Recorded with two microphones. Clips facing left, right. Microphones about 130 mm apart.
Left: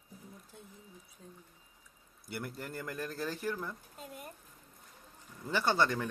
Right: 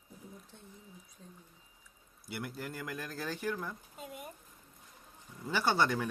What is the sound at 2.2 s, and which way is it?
A child's voice, 5° right (ahead or behind).